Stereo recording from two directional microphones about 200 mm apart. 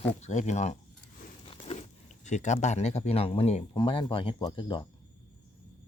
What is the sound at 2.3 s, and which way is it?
Speech, 35° left (ahead or behind).